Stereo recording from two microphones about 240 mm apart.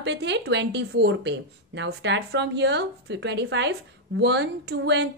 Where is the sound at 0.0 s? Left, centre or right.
Right.